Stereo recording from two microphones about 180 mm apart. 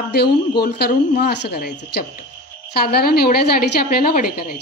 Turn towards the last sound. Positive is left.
turn(degrees=55)  # may be behind; listen again after turning